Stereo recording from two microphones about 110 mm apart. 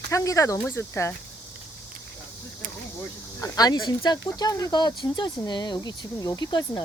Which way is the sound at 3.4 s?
35° left (ahead or behind).